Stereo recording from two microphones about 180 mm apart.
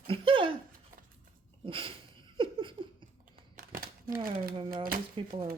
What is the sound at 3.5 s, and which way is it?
Crumpling, 50° right (ahead or behind).